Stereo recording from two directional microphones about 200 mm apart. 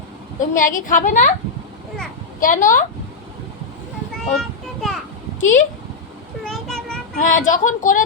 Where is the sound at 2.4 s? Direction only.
40° left (ahead or behind).